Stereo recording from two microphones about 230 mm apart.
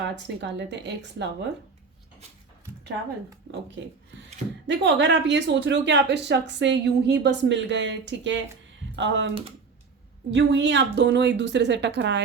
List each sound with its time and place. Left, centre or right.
0.3 s speech: right
4.6 s speech: right
10.3 s speech: right